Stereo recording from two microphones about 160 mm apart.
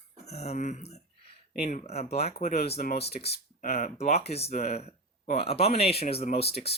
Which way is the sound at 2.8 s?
80° left.